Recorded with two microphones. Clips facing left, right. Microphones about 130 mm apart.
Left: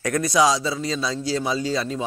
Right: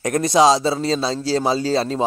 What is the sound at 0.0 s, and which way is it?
Speech, 25° right (ahead or behind).